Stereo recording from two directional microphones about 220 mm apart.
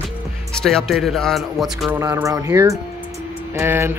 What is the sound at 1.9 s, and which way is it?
Speech, 15° right (ahead or behind).